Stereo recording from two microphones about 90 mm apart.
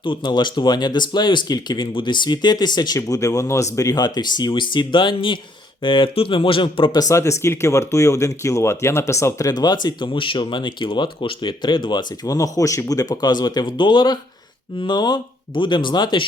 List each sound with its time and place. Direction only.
0.0 s speech: 60° left (ahead or behind)
1.9 s speech: 65° left (ahead or behind)
6.9 s speech: 40° left (ahead or behind); by 16.2 s 60° left (ahead or behind)